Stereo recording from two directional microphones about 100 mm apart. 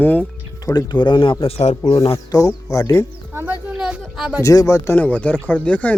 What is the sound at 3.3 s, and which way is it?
Speech, 20° right (ahead or behind).